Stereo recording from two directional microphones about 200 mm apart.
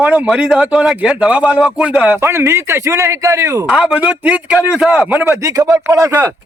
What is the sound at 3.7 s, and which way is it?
A man's voice, 5° right (ahead or behind).